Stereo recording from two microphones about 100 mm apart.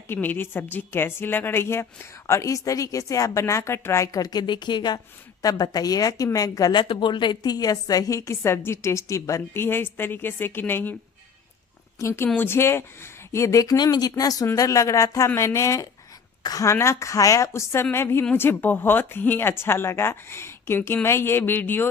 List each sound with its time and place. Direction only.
0.1 s a woman's voice: 20° left (ahead or behind)
11.9 s a woman's voice: 30° left (ahead or behind)